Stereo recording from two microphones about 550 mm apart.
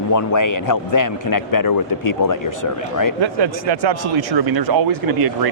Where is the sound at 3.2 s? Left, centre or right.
Right.